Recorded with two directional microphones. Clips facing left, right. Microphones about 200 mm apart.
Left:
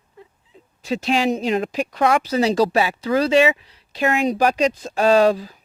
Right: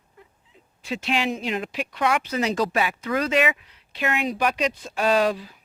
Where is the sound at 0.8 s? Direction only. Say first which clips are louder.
Left 6 dB; 40° left (ahead or behind).